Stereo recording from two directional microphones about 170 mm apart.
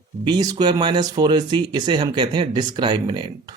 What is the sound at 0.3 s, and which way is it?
A man's voice, 25° right (ahead or behind).